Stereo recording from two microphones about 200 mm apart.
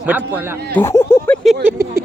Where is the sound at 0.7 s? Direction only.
10° left (ahead or behind).